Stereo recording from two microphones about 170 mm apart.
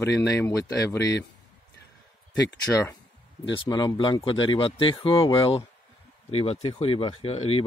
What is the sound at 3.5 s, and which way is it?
Speech, 30° left (ahead or behind).